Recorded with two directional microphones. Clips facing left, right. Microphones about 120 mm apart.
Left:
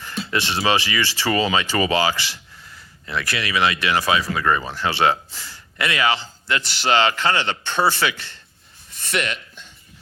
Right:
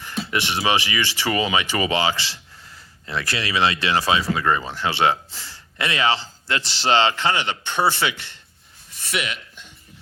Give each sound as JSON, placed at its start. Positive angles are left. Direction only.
{"t": 0.3, "sound": "speech", "side_deg": -20}
{"t": 9.0, "sound": "speech", "side_deg": -5}